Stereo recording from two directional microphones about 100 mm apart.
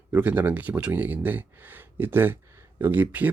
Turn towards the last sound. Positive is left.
turn(degrees=-15)  # may be behind; listen again after turning